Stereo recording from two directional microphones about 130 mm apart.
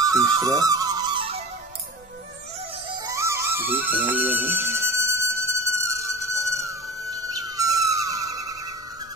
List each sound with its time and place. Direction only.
0.2 s music: 25° right (ahead or behind)
3.1 s music: 20° right (ahead or behind)